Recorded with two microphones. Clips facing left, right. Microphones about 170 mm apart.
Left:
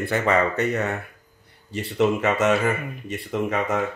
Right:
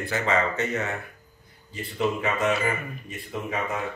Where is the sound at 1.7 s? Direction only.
75° left (ahead or behind).